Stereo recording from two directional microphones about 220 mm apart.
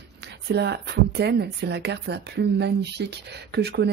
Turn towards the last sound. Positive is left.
turn(degrees=-50)  # may be behind; listen again after turning